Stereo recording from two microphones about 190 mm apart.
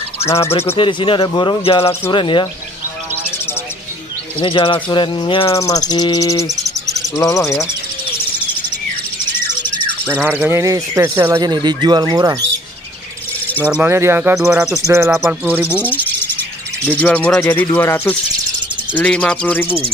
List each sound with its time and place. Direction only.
0.2 s speech: 15° left (ahead or behind)
0.7 s speech: 25° left (ahead or behind)
4.4 s speech: 30° left (ahead or behind)
6.5 s bird: 15° right (ahead or behind)
7.2 s speech: 15° left (ahead or behind)
10.1 s speech: 10° right (ahead or behind)
13.6 s speech: 5° right (ahead or behind)
14.9 s speech: 15° right (ahead or behind)
15.7 s speech: 10° left (ahead or behind)